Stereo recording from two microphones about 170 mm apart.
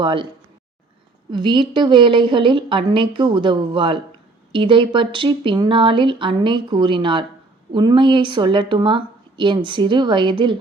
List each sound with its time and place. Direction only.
0.0 s a woman's voice: 30° right (ahead or behind)
1.3 s a woman's voice: 25° right (ahead or behind)